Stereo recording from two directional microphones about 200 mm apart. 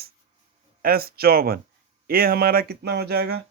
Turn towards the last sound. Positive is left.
turn(degrees=-55)  # may be behind; listen again after turning